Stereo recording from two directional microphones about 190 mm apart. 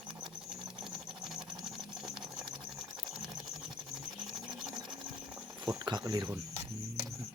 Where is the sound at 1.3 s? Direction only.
Centre (ahead or behind).